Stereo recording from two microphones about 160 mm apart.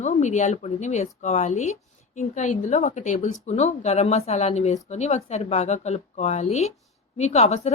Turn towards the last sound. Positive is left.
turn(degrees=40)  # may be behind; listen again after turning